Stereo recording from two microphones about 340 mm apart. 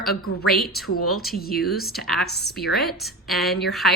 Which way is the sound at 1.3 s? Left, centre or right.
Left.